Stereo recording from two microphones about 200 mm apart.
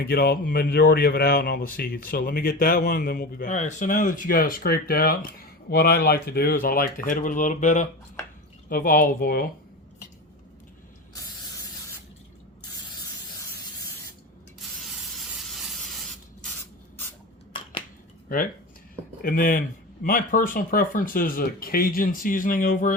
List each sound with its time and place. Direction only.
0.0 s speech: 50° left (ahead or behind)
14.8 s spray: centre (ahead or behind)
17.5 s a sound: 25° left (ahead or behind)
19.2 s speech: 45° left (ahead or behind)